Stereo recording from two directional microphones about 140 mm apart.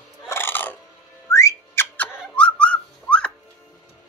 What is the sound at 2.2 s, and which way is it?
Whistling, 5° left (ahead or behind).